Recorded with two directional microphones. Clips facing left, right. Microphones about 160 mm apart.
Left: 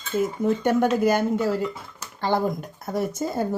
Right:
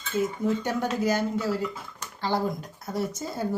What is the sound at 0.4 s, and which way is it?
Speech, 55° left (ahead or behind).